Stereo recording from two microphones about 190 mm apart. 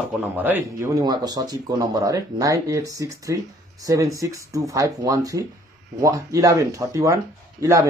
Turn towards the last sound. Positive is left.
turn(degrees=-15)  # may be behind; listen again after turning